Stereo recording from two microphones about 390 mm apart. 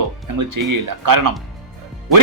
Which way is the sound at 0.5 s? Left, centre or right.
Right.